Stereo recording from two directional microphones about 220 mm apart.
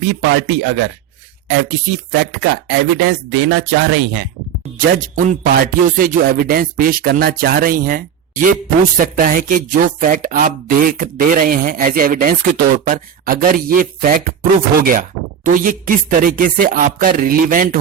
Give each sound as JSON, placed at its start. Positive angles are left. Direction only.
{"t": 0.0, "sound": "speech", "side_deg": -50}
{"t": 2.1, "sound": "speech", "side_deg": -45}
{"t": 4.8, "sound": "speech", "side_deg": -40}